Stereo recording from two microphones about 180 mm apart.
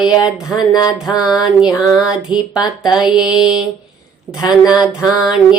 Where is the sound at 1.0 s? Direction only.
20° left (ahead or behind).